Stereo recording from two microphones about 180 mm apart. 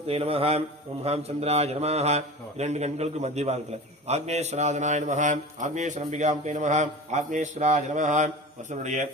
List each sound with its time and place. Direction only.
0.1 s a man's voice: 35° right (ahead or behind)